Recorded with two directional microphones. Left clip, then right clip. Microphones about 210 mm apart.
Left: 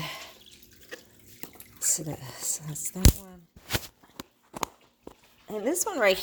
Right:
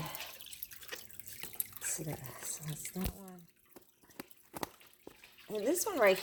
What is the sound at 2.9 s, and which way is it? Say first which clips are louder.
Speech: left 16 dB; 25° left (ahead or behind).